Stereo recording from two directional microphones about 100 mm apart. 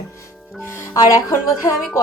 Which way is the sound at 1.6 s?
30° left (ahead or behind).